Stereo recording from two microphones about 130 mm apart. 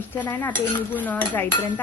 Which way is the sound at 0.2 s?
10° left (ahead or behind).